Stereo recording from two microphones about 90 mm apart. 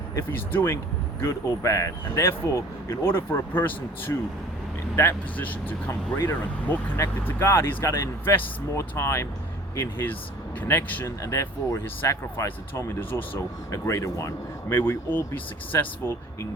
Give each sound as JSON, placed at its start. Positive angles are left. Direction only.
{"t": 0.2, "sound": "speech", "side_deg": 25}
{"t": 11.0, "sound": "speech", "side_deg": 35}
{"t": 13.1, "sound": "speech", "side_deg": 75}
{"t": 13.7, "sound": "speech", "side_deg": 35}